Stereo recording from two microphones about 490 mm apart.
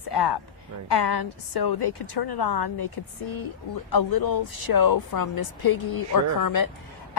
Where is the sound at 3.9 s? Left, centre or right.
Left.